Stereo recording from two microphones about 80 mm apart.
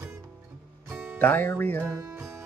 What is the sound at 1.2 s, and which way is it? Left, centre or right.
Speech, left.